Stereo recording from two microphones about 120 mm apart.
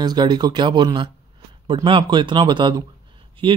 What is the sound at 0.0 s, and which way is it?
Speech, 35° right (ahead or behind).